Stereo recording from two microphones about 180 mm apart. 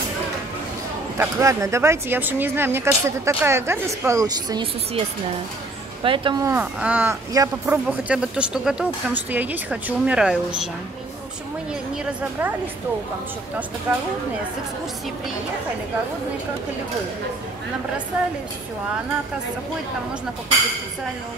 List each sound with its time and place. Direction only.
1.1 s speech: 15° right (ahead or behind)
6.0 s speech: 30° right (ahead or behind)
6.4 s a woman's voice: 10° right (ahead or behind)
12.0 s speech: 10° right (ahead or behind)
13.9 s speech: 10° right (ahead or behind)